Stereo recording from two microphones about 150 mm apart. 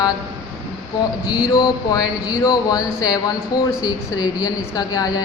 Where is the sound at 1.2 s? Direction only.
25° left (ahead or behind).